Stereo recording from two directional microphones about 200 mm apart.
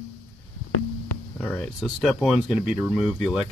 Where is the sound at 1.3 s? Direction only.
5° left (ahead or behind).